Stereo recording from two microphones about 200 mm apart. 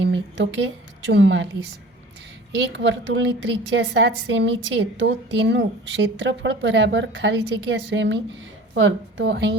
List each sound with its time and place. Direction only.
0.0 s a woman's voice: 70° right (ahead or behind)
2.7 s a woman's voice: 65° right (ahead or behind)